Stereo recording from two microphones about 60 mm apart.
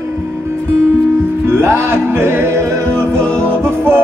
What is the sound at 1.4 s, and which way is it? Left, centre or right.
Music, right.